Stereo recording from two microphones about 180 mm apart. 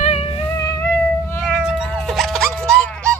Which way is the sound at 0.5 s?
15° left (ahead or behind).